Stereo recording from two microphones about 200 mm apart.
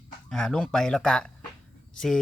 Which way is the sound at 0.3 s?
5° left (ahead or behind).